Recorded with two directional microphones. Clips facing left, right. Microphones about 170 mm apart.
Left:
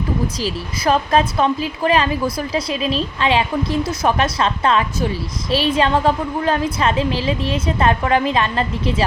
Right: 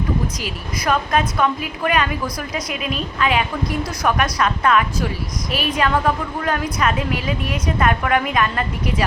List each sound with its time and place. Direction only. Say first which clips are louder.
0.3 s a woman's voice: left 4 dB; 30° left (ahead or behind)